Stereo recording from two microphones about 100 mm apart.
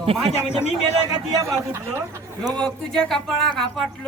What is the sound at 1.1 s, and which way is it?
Speech, 35° right (ahead or behind).